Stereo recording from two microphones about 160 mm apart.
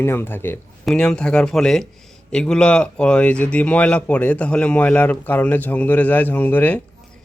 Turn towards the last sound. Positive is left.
turn(degrees=10)  # may be behind; listen again after turning